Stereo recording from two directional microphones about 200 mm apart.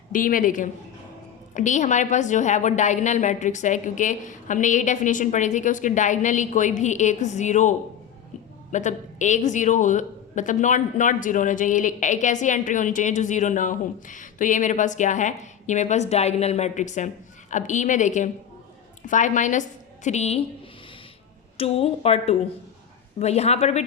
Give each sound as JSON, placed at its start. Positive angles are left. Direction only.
{"t": 0.1, "sound": "speech", "side_deg": 40}
{"t": 21.6, "sound": "speech", "side_deg": 30}